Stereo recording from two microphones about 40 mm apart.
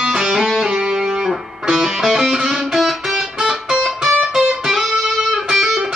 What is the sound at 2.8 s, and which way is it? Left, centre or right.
Music, centre.